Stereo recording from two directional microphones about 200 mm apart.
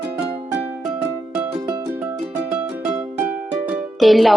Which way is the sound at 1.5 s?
20° right (ahead or behind).